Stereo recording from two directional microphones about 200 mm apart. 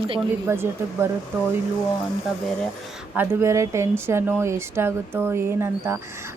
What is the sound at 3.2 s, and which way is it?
A woman's voice, 15° right (ahead or behind).